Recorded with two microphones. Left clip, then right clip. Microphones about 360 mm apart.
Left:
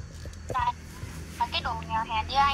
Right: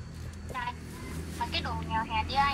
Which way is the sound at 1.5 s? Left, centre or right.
Centre.